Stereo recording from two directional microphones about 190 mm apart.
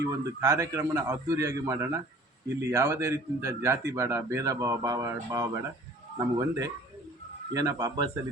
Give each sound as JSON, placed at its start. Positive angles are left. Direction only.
{"t": 0.0, "sound": "speech", "side_deg": -15}